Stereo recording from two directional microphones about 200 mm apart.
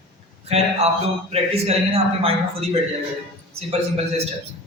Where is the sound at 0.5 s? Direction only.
30° right (ahead or behind).